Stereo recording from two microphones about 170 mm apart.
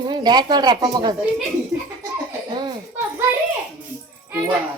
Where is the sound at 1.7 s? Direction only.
5° right (ahead or behind).